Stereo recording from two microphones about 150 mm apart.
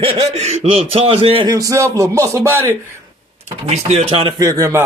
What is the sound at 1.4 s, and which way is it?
Speech, 20° right (ahead or behind).